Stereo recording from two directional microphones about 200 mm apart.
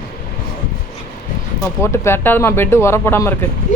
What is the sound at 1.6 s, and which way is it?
Speech, 15° left (ahead or behind).